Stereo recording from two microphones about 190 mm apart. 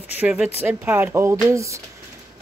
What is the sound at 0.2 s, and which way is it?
Speech, 5° right (ahead or behind).